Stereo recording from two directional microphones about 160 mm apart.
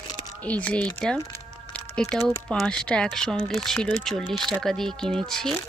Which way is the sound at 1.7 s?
5° left (ahead or behind).